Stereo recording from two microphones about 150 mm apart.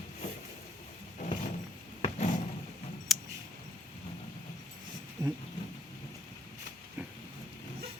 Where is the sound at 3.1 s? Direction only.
Centre (ahead or behind).